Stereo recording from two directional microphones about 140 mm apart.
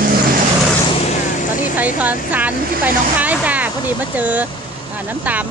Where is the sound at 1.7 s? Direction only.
10° right (ahead or behind).